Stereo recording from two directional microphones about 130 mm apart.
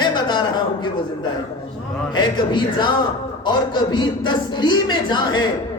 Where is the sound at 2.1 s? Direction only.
35° left (ahead or behind).